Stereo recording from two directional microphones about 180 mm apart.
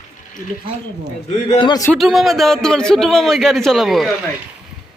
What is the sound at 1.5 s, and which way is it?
Speech, 25° left (ahead or behind).